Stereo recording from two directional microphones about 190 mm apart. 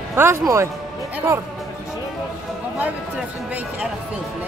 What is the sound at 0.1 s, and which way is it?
Speech, 15° right (ahead or behind).